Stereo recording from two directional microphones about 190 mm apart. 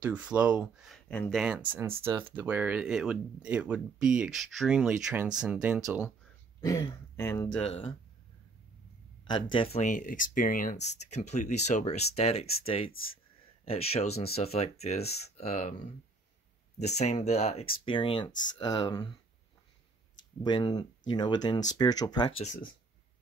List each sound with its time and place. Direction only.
0.0 s speech: 5° right (ahead or behind); by 1.3 s 10° left (ahead or behind)
1.3 s speech: 5° right (ahead or behind)
6.6 s speech: 15° left (ahead or behind)
7.6 s speech: 30° left (ahead or behind)
9.2 s speech: 25° left (ahead or behind)
16.8 s speech: 35° left (ahead or behind); by 19.1 s 20° left (ahead or behind)
20.4 s speech: 20° left (ahead or behind)
22.4 s speech: 40° left (ahead or behind)